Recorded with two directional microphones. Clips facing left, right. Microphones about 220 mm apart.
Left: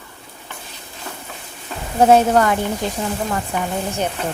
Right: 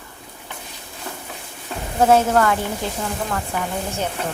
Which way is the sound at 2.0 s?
20° left (ahead or behind).